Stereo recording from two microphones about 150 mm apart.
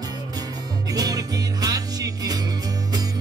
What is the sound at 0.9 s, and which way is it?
Music, 25° right (ahead or behind).